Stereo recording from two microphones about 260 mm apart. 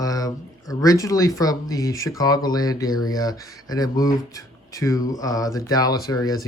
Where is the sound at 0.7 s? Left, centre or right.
Centre.